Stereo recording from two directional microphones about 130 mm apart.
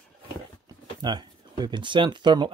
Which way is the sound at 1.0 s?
35° right (ahead or behind).